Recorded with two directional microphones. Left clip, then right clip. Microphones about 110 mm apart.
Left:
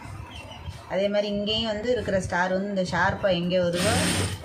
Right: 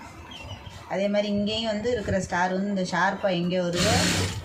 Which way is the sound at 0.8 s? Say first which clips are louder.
Left 1 dB; 35° left (ahead or behind).